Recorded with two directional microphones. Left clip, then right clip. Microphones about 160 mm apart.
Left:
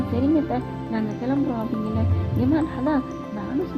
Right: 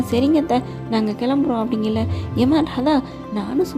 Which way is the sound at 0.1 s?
30° right (ahead or behind).